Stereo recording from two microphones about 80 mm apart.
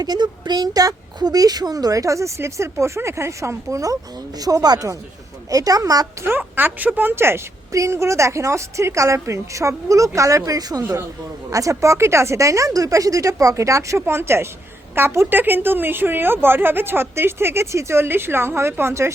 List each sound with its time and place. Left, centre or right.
0.0 s speech: right
6.2 s a woman's voice: right